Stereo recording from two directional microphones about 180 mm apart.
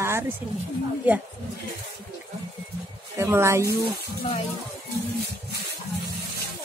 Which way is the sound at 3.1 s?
15° right (ahead or behind).